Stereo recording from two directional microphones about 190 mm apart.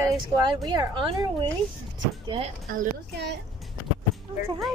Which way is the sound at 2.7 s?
60° right (ahead or behind).